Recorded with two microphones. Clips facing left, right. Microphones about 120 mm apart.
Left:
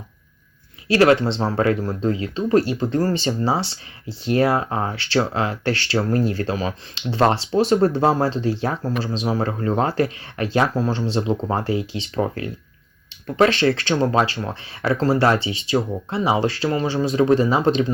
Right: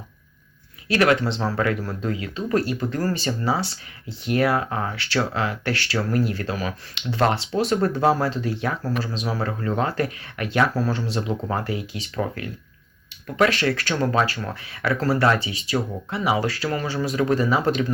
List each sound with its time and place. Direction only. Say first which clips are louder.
0.9 s speech: left 4 dB; 30° left (ahead or behind)